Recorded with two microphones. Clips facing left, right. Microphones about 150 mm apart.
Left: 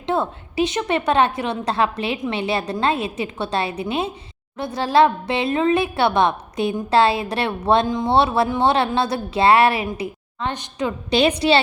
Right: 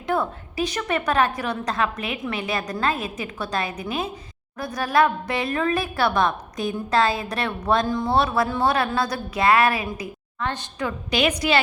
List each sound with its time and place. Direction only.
0.1 s a woman's voice: 25° left (ahead or behind)
11.1 s a woman's voice: 30° left (ahead or behind)